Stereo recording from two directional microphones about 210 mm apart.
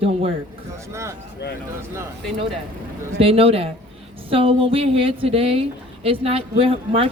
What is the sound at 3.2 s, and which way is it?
A woman's voice, 25° right (ahead or behind).